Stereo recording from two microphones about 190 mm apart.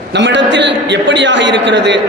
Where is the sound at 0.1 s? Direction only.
70° right (ahead or behind).